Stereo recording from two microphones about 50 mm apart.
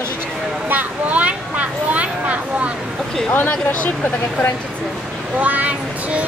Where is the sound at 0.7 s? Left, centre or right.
Right.